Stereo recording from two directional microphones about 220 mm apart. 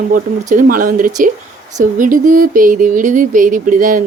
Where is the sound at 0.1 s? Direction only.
35° right (ahead or behind).